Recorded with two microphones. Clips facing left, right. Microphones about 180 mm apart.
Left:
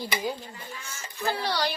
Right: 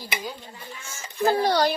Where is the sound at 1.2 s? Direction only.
45° right (ahead or behind).